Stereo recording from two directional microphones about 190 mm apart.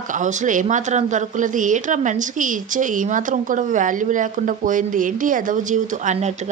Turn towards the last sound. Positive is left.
turn(degrees=-40)  # may be behind; listen again after turning